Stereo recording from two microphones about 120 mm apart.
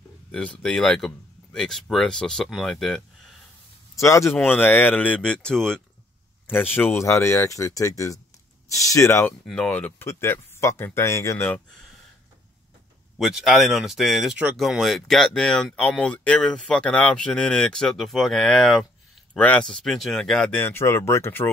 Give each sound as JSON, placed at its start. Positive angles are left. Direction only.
{"t": 0.3, "sound": "speech", "side_deg": 5}
{"t": 3.9, "sound": "speech", "side_deg": 25}
{"t": 6.4, "sound": "speech", "side_deg": 15}
{"t": 9.5, "sound": "speech", "side_deg": 10}
{"t": 13.2, "sound": "speech", "side_deg": 0}
{"t": 20.5, "sound": "speech", "side_deg": 20}